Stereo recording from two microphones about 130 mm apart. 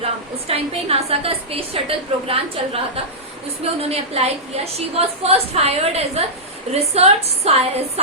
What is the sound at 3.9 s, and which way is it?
A woman's voice, 55° right (ahead or behind).